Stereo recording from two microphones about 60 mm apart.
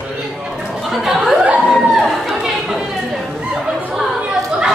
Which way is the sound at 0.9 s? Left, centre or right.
Centre.